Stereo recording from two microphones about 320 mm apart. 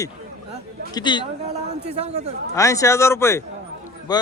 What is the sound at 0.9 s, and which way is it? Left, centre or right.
Speech, centre.